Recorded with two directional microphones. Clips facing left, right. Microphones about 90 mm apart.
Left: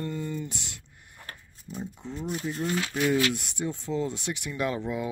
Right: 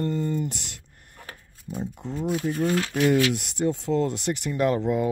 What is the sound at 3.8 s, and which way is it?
Speech, 75° right (ahead or behind).